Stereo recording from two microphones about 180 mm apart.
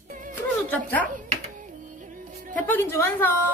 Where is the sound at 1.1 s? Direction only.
45° right (ahead or behind).